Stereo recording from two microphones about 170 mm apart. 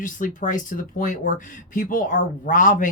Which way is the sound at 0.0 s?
50° left (ahead or behind).